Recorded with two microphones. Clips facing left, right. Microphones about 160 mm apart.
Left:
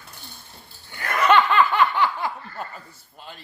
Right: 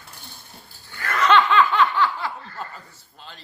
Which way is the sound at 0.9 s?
15° left (ahead or behind).